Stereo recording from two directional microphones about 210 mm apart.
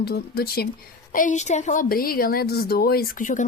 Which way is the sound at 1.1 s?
35° left (ahead or behind).